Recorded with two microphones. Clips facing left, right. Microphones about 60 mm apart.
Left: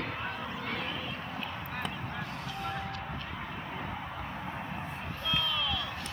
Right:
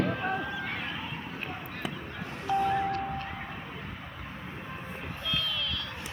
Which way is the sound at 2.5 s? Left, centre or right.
Right.